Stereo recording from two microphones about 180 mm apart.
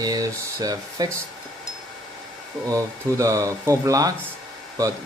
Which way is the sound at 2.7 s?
20° right (ahead or behind).